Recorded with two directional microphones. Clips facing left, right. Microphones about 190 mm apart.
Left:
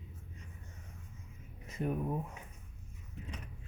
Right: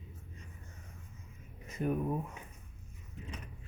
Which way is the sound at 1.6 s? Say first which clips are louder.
Right 2 dB; 25° left (ahead or behind).